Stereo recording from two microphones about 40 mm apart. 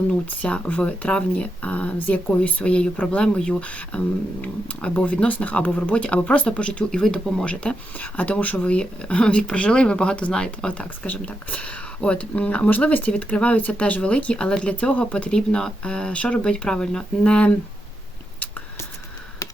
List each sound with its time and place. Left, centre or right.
0.4 s speech: left
5.9 s speech: left
7.0 s speech: centre
7.4 s speech: left
7.9 s speech: left
8.6 s speech: left
11.0 s speech: left
13.3 s speech: left
15.3 s speech: left